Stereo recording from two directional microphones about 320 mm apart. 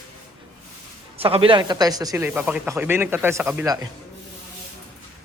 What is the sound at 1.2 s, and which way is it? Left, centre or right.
Speech, centre.